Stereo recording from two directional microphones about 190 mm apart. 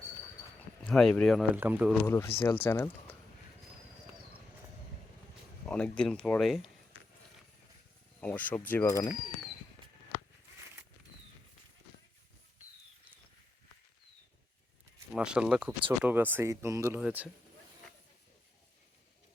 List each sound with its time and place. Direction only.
0.9 s speech: 5° left (ahead or behind)
1.5 s speech: 10° right (ahead or behind)
2.0 s speech: 15° left (ahead or behind)
2.3 s speech: 25° left (ahead or behind)
2.6 s speech: 10° left (ahead or behind)
5.6 s speech: 5° left (ahead or behind)
8.2 s speech: 10° left (ahead or behind)
15.1 s speech: 5° right (ahead or behind)